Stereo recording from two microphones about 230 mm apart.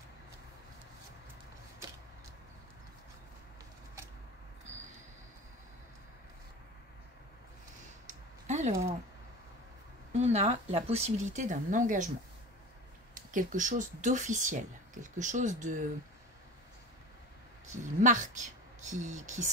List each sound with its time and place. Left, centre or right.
8.1 s a sound: right
10.1 s speech: right
13.1 s speech: right
17.6 s speech: right